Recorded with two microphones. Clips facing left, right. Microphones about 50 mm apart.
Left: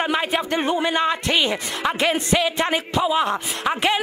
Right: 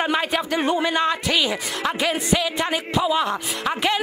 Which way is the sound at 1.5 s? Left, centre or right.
Centre.